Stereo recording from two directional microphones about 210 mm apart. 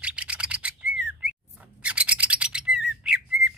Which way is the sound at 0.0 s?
5° right (ahead or behind).